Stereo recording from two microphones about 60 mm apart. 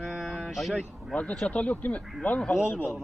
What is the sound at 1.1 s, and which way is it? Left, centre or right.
Speech, left.